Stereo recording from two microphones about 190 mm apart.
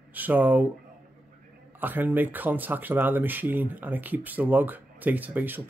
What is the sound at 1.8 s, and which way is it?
Speech, 10° right (ahead or behind).